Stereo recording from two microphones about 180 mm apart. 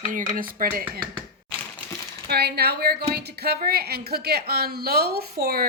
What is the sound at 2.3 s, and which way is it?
A woman's voice, 65° right (ahead or behind).